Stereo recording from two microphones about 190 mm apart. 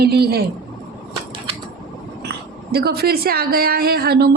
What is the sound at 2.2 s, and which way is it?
A woman's voice, 55° right (ahead or behind).